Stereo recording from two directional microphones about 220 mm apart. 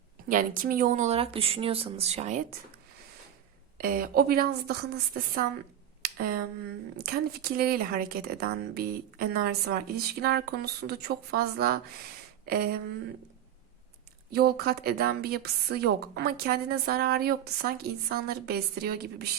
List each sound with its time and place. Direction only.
0.3 s speech: 40° right (ahead or behind)
3.8 s a woman's voice: 40° right (ahead or behind)
6.0 s a sound: 40° right (ahead or behind)
7.0 s a woman's voice: 40° right (ahead or behind)
14.3 s a woman's voice: 45° right (ahead or behind)